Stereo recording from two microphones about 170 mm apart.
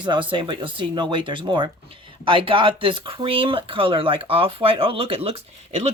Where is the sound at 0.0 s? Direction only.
30° right (ahead or behind).